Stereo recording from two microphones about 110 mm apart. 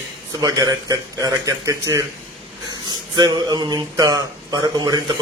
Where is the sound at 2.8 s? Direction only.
40° right (ahead or behind).